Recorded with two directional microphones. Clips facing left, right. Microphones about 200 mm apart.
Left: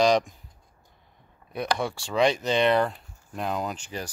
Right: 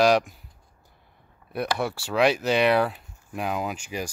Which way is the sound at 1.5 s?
5° right (ahead or behind).